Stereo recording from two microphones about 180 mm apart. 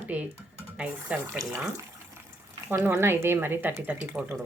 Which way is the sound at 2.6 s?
15° right (ahead or behind).